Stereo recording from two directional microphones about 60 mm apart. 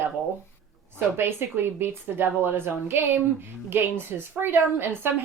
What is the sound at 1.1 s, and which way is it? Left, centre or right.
Speech, right.